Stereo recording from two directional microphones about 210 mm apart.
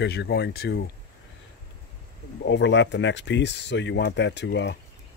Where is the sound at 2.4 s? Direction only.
55° left (ahead or behind).